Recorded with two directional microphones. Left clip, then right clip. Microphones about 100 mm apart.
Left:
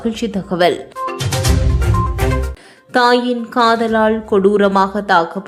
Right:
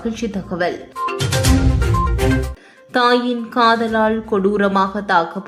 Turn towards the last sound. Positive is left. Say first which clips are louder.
# left 3 dB
turn(degrees=20)  # may be behind; listen again after turning